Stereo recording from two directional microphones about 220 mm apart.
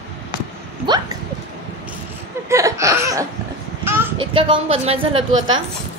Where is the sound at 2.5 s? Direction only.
15° right (ahead or behind).